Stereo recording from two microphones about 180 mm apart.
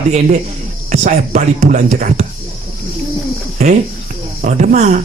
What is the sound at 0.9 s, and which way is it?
Speech, 45° right (ahead or behind).